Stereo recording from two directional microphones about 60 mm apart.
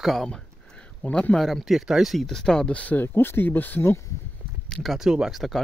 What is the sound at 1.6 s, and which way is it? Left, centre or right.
Speech, centre.